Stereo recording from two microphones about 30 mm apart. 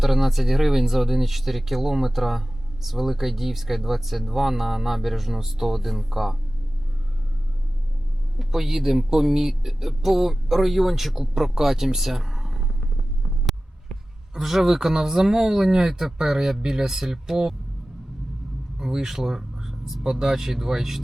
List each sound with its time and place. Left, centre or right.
0.0 s speech: centre
8.4 s speech: centre
14.3 s speech: centre
19.0 s speech: centre